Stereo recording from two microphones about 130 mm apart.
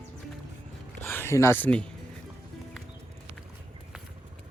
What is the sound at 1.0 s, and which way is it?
Speech, 15° left (ahead or behind).